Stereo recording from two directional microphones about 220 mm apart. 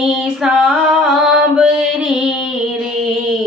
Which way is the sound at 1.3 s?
5° right (ahead or behind).